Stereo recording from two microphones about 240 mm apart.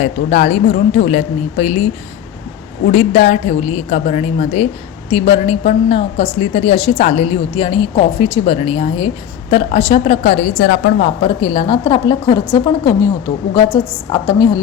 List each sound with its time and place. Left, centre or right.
0.0 s a woman's voice: left
14.1 s a woman's voice: centre